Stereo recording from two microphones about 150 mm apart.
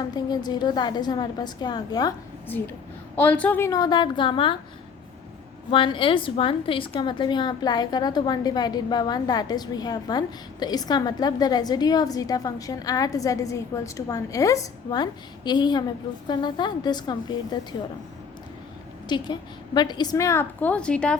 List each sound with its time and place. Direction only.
0.1 s a woman's voice: 25° left (ahead or behind)
3.2 s a woman's voice: 10° left (ahead or behind)
3.7 s a woman's voice: 25° left (ahead or behind)
5.7 s a woman's voice: 35° left (ahead or behind)
19.0 s a woman's voice: 30° left (ahead or behind); by 21.2 s 5° left (ahead or behind)